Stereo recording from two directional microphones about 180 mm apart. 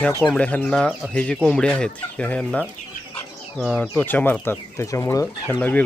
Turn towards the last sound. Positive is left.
turn(degrees=10)  # may be behind; listen again after turning